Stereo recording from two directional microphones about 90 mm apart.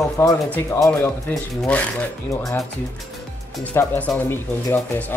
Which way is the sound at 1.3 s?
Centre (ahead or behind).